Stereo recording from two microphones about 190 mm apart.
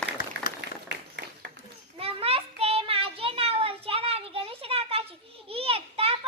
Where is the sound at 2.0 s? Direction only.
30° right (ahead or behind).